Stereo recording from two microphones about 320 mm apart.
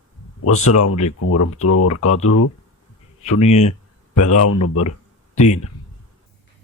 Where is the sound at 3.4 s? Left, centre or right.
Centre.